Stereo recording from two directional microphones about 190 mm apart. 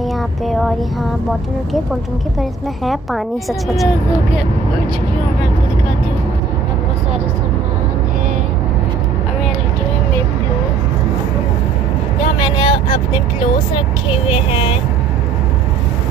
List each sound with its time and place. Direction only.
0.5 s a woman's voice: centre (ahead or behind)
2.8 s a woman's voice: centre (ahead or behind)
12.2 s speech: 25° left (ahead or behind)
14.2 s speech: 25° left (ahead or behind)